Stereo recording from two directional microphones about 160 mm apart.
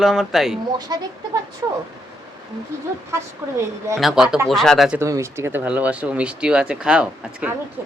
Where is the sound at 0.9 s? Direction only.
25° right (ahead or behind).